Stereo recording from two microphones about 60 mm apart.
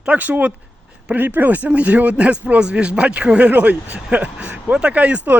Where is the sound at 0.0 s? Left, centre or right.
Right.